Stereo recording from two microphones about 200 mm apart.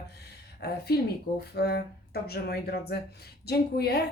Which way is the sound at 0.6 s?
55° left (ahead or behind).